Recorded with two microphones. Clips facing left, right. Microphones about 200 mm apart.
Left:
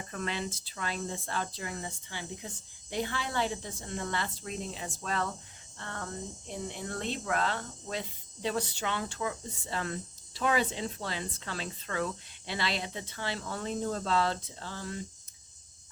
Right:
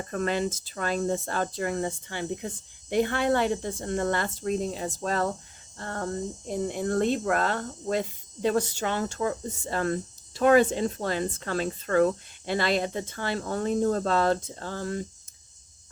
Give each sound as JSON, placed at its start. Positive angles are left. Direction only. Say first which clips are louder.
{"t": 0.1, "sound": "speech", "louder": "right 9 dB", "side_deg": -45}